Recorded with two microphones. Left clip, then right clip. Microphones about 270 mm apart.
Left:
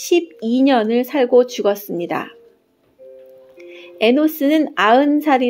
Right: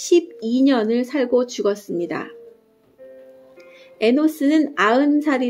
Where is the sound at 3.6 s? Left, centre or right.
Left.